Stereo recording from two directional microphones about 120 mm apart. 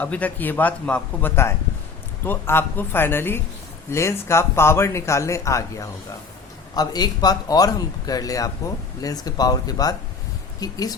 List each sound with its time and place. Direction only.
0.0 s a man's voice: 15° left (ahead or behind); by 10.9 s 30° left (ahead or behind)